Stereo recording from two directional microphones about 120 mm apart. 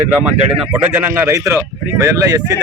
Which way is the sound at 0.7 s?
20° right (ahead or behind).